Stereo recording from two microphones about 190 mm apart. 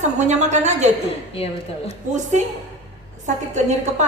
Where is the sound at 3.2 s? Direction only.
40° right (ahead or behind).